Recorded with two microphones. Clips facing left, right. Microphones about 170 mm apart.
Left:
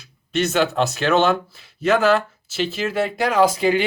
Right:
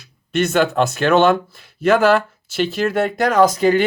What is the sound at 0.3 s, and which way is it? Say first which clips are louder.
Speech: right 3 dB; 50° right (ahead or behind).